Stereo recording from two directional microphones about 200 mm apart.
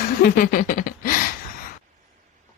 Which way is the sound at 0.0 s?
45° left (ahead or behind).